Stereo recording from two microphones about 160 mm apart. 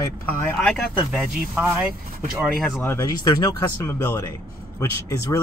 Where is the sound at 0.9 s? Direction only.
10° right (ahead or behind).